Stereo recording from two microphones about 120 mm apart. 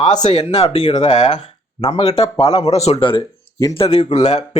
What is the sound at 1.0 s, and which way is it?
Speech, 65° left (ahead or behind).